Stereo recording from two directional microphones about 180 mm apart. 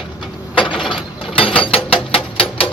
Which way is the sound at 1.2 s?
30° left (ahead or behind).